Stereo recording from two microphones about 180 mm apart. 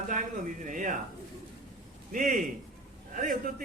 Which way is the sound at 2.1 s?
45° right (ahead or behind).